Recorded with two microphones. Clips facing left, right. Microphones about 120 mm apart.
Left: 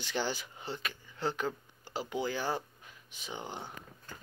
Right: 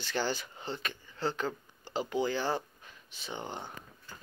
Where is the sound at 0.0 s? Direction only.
15° left (ahead or behind).